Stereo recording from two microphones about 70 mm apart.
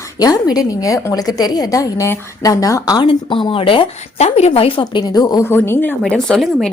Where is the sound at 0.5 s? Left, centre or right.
Left.